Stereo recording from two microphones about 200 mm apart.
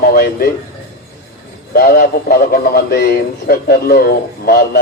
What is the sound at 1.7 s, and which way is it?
A man's voice, 50° left (ahead or behind).